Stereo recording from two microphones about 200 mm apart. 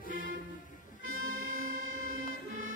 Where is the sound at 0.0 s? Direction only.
45° left (ahead or behind).